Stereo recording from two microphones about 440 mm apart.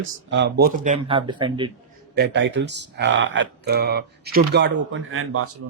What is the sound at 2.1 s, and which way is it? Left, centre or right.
Speech, right.